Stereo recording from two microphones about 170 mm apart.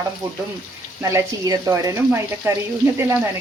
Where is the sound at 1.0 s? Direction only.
15° right (ahead or behind).